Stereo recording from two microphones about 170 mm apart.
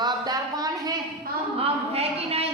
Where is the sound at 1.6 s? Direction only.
35° right (ahead or behind).